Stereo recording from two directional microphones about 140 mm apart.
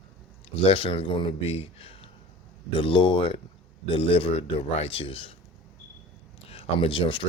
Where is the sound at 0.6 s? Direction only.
40° left (ahead or behind).